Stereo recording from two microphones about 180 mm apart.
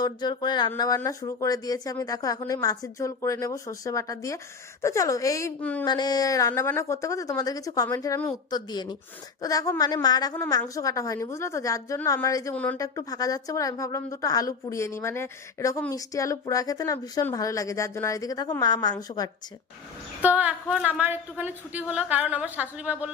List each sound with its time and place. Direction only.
0.0 s a woman's voice: 25° left (ahead or behind)
5.8 s a woman's voice: 20° left (ahead or behind)
12.8 s a woman's voice: 20° left (ahead or behind)
20.2 s a woman's voice: 10° right (ahead or behind)